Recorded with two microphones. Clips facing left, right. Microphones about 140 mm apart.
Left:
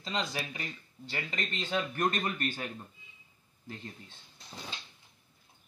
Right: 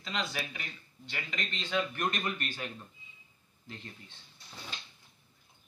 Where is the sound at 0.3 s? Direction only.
30° left (ahead or behind).